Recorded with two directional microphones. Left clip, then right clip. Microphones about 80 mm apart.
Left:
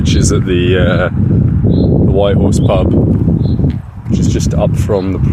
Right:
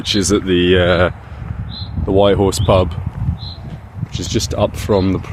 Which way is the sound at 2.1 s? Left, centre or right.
Right.